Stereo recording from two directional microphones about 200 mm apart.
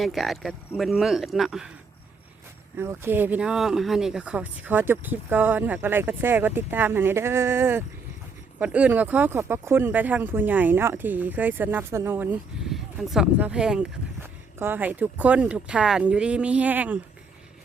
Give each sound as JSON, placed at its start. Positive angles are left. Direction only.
{"t": 0.0, "sound": "speech", "side_deg": 0}
{"t": 2.7, "sound": "speech", "side_deg": -10}